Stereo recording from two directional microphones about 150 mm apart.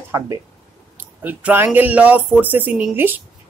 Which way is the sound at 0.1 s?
20° right (ahead or behind).